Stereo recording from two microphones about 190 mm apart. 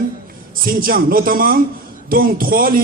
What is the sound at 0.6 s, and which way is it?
Speech, 50° right (ahead or behind).